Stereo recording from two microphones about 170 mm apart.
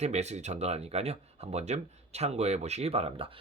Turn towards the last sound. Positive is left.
turn(degrees=-35)  # may be behind; listen again after turning